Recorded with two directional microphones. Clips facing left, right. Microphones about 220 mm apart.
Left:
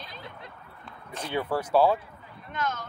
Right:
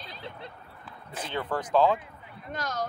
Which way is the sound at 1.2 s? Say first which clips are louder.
Left 3 dB; 10° left (ahead or behind).